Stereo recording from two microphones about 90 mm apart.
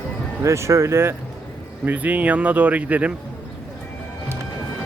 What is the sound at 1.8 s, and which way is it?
Speech, 20° right (ahead or behind).